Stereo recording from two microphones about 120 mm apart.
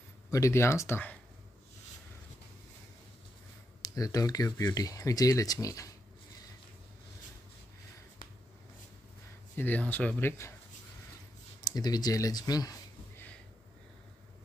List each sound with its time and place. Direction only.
0.3 s speech: 25° left (ahead or behind)
3.8 s speech: 30° left (ahead or behind)
9.6 s speech: 15° left (ahead or behind)
11.6 s speech: 35° left (ahead or behind)